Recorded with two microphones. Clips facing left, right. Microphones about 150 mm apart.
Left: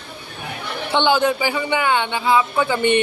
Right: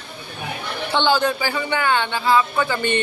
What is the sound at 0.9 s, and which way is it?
A man's voice, 20° left (ahead or behind).